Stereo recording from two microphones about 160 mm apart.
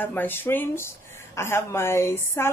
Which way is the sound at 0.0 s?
10° left (ahead or behind).